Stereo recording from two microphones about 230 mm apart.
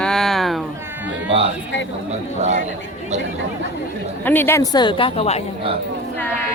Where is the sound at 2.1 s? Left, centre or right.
Right.